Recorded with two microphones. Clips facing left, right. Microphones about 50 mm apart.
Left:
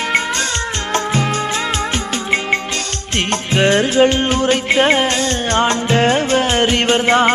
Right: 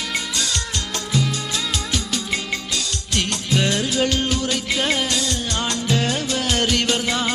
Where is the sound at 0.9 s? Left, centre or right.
Left.